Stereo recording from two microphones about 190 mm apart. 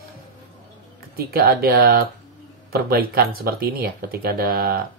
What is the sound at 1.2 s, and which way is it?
Speech, 55° right (ahead or behind).